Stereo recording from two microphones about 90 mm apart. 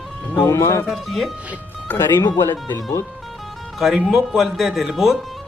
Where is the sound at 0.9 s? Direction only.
Centre (ahead or behind).